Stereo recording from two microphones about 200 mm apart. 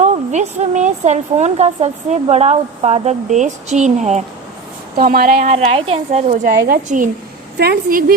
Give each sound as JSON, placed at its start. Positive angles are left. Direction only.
{"t": 0.0, "sound": "a woman's voice", "side_deg": -35}
{"t": 4.9, "sound": "speech", "side_deg": -45}
{"t": 5.5, "sound": "a woman's voice", "side_deg": -30}